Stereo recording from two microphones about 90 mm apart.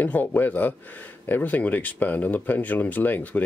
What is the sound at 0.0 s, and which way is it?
Speech, 20° left (ahead or behind).